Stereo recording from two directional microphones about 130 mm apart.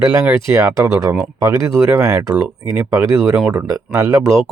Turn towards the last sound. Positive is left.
turn(degrees=-25)  # may be behind; listen again after turning